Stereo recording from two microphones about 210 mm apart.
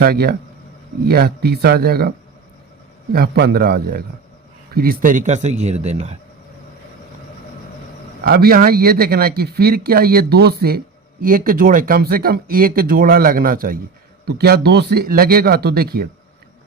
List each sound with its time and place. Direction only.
0.0 s a man's voice: 45° right (ahead or behind); by 6.1 s 30° right (ahead or behind)
8.2 s speech: 45° right (ahead or behind)